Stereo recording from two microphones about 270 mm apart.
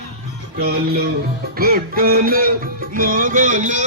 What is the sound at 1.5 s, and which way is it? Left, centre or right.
Music, right.